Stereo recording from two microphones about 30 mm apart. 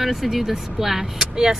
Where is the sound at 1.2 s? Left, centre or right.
Centre.